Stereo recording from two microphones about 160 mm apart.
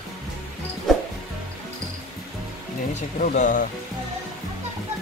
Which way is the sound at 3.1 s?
55° left (ahead or behind).